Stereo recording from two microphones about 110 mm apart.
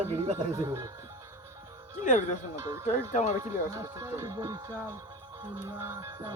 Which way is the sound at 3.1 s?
90° left.